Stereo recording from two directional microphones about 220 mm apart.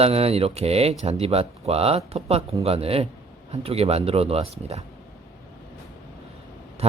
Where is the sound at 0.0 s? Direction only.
25° right (ahead or behind).